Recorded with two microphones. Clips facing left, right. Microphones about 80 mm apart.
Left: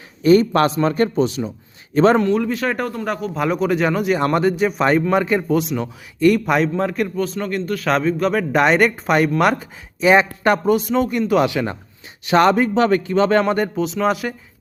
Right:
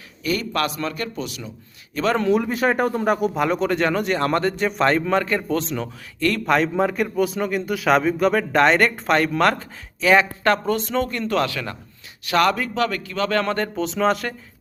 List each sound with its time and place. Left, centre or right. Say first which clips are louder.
0.2 s a man's voice: left 10 dB; left
2.2 s speech: even; centre
3.3 s speech: left 2 dB; centre; by 13.4 s left
13.4 s speech: left 4 dB; centre